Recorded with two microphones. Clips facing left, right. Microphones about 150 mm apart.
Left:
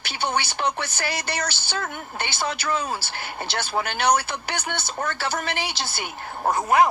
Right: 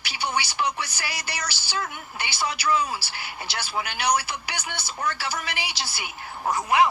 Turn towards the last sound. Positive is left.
turn(degrees=45)  # may be behind; listen again after turning